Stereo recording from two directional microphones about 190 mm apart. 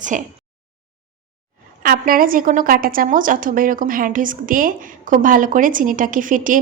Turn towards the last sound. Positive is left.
turn(degrees=-45)  # may be behind; listen again after turning